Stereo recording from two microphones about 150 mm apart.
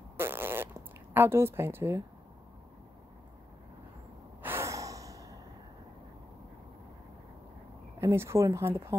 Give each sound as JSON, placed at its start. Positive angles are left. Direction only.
{"t": 0.2, "sound": "speech", "side_deg": -15}
{"t": 4.4, "sound": "sigh", "side_deg": -15}
{"t": 8.0, "sound": "speech", "side_deg": -20}